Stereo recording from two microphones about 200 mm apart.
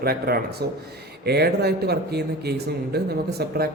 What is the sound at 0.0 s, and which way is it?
Speech, 50° right (ahead or behind).